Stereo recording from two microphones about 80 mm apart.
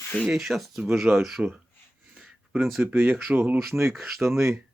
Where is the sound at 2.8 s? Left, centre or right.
Right.